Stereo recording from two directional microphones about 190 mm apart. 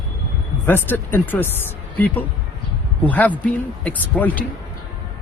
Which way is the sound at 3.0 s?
10° left (ahead or behind).